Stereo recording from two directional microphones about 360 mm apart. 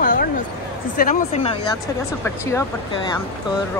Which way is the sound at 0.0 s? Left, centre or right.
Left.